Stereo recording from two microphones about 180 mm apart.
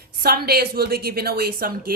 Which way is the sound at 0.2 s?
60° right (ahead or behind).